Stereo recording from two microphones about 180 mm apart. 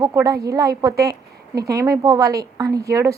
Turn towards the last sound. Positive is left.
turn(degrees=-15)  # may be behind; listen again after turning